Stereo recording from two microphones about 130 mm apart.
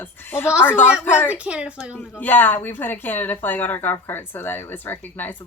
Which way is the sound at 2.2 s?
15° left (ahead or behind).